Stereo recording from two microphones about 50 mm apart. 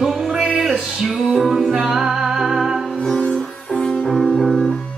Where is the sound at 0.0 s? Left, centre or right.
Centre.